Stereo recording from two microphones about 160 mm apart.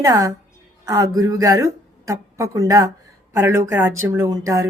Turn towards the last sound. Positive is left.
turn(degrees=-20)  # may be behind; listen again after turning